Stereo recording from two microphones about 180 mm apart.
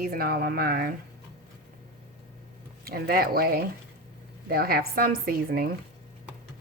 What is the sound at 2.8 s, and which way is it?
A woman's voice, 55° right (ahead or behind).